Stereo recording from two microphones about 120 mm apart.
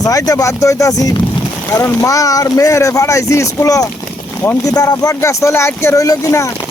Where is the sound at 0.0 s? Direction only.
30° left (ahead or behind).